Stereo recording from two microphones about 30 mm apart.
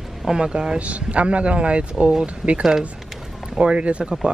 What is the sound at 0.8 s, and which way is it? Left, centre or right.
Speech, right.